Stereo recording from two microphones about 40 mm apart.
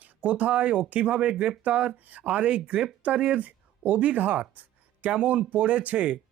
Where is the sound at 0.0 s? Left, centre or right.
Right.